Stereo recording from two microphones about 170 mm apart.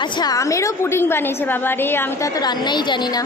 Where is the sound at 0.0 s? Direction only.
25° left (ahead or behind).